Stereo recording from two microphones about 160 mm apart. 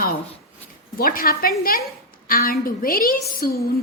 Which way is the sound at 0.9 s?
65° left (ahead or behind).